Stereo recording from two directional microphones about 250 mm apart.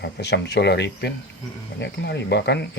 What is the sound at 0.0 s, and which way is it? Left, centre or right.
Speech, left.